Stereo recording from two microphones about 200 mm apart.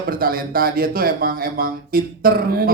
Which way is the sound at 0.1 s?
45° right (ahead or behind).